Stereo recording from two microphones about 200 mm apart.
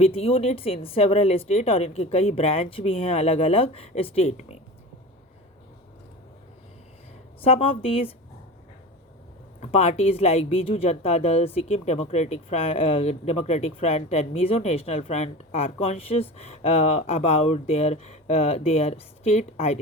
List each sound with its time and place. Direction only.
0.0 s speech: 30° left (ahead or behind)
7.4 s speech: 30° left (ahead or behind)
9.6 s speech: 30° left (ahead or behind)